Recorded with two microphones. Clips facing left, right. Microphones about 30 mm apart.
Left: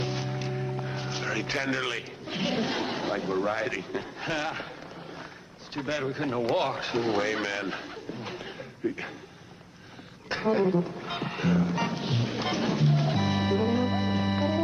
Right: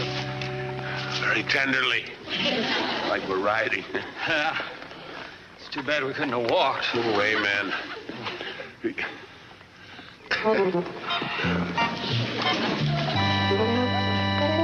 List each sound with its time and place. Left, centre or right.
0.0 s speech: right
5.8 s speech: right
10.2 s music: right